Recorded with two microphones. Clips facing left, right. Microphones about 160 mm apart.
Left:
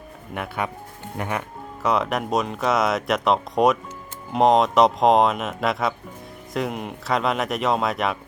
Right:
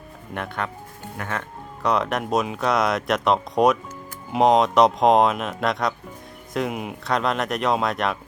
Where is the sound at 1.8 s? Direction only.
Centre (ahead or behind).